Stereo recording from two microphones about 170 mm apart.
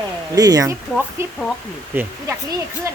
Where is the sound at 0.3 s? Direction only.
20° right (ahead or behind).